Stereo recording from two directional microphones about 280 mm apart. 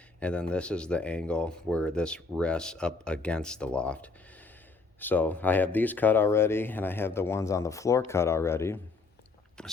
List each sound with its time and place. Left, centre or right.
0.2 s speech: centre